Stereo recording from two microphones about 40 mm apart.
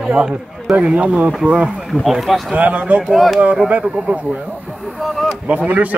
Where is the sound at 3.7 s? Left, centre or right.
Right.